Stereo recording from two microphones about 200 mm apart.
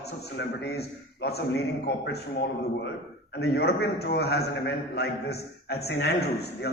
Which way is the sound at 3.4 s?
55° left (ahead or behind).